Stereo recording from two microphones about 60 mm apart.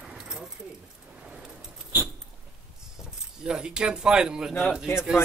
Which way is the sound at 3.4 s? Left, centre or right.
Centre.